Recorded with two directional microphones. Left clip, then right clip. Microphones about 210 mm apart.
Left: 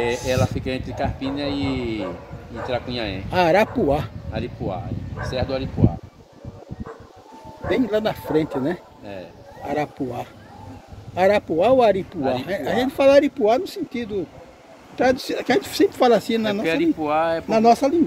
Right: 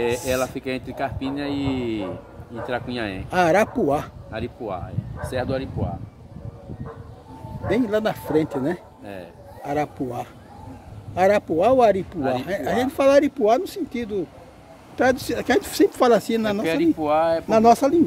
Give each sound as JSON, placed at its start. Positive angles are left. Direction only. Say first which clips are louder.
{"t": 0.3, "sound": "speech", "louder": "left 1 dB", "side_deg": -40}
{"t": 3.3, "sound": "speech", "louder": "left 1 dB", "side_deg": -5}
{"t": 4.3, "sound": "speech", "louder": "left 1 dB", "side_deg": -40}
{"t": 7.7, "sound": "speech", "louder": "left 1 dB", "side_deg": -5}
{"t": 9.0, "sound": "speech", "louder": "left 1 dB", "side_deg": -35}
{"t": 9.7, "sound": "speech", "louder": "even", "side_deg": -5}
{"t": 16.6, "sound": "speech", "louder": "right 1 dB", "side_deg": -55}
{"t": 17.5, "sound": "speech", "louder": "even", "side_deg": -15}